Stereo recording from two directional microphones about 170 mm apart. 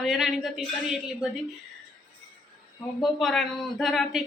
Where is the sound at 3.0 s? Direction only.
Centre (ahead or behind).